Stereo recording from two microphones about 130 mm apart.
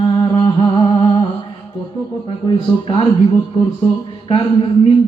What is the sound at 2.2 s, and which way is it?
Speech, 40° left (ahead or behind).